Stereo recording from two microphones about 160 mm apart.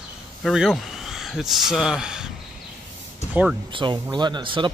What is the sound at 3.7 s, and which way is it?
Speech, 30° right (ahead or behind).